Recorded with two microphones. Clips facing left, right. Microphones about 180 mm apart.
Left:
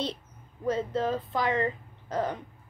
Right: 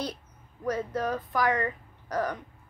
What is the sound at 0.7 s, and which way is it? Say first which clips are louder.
A woman's voice: left 2 dB; 25° left (ahead or behind).